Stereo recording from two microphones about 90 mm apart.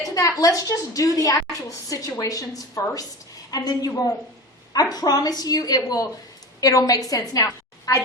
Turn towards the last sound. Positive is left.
turn(degrees=40)  # may be behind; listen again after turning